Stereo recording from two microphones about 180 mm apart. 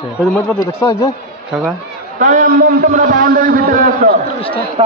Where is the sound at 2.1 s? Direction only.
45° right (ahead or behind).